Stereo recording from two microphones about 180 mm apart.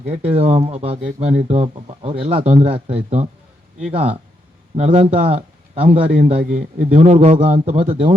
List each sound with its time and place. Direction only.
0.1 s speech: 35° right (ahead or behind)